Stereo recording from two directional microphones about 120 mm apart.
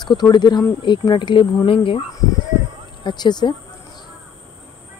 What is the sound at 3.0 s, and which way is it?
Speech, 40° left (ahead or behind).